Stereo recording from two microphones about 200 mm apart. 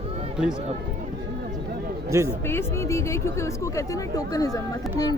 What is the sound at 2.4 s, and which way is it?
A woman's voice, 10° left (ahead or behind).